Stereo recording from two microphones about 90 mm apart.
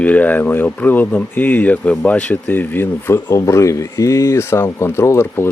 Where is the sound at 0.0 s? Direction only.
15° left (ahead or behind).